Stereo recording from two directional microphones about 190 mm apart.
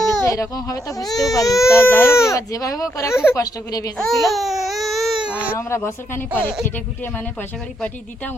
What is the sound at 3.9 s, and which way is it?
Speech, 5° left (ahead or behind).